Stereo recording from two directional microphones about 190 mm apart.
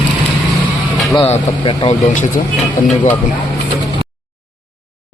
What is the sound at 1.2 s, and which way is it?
Speech, 25° left (ahead or behind).